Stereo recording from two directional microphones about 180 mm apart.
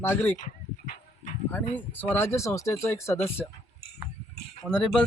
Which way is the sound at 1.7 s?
10° left (ahead or behind).